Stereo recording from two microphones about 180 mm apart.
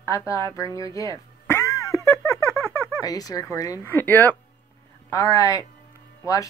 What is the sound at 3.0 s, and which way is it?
Speech, 20° left (ahead or behind).